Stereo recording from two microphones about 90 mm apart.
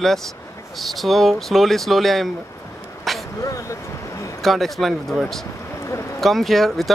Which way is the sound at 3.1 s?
Centre (ahead or behind).